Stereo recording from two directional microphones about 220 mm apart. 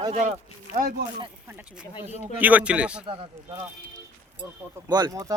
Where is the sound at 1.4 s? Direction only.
5° right (ahead or behind).